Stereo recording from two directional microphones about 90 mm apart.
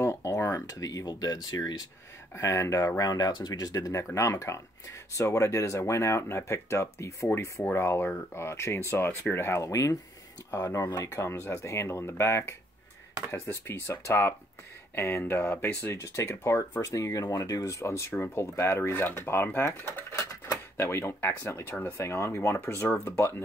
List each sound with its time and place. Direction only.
0.0 s a sound: 30° left (ahead or behind)
0.7 s speech: 40° left (ahead or behind)
2.4 s speech: 35° left (ahead or behind)
3.0 s speech: 45° left (ahead or behind); by 23.3 s 25° left (ahead or behind)